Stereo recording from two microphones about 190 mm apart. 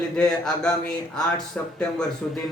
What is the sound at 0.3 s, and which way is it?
Speech, 5° left (ahead or behind).